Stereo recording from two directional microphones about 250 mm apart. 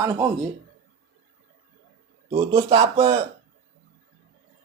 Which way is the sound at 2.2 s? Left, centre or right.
Right.